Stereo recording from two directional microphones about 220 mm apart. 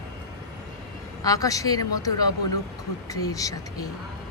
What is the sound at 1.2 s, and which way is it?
Speech, 15° left (ahead or behind).